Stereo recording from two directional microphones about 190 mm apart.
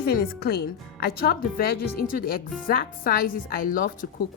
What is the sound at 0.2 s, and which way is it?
Speech, 55° left (ahead or behind).